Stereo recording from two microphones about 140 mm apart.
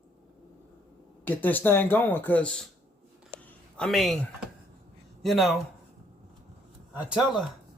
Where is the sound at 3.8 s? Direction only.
Centre (ahead or behind).